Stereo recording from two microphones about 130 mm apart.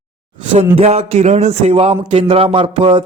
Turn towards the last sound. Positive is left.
turn(degrees=-45)  # may be behind; listen again after turning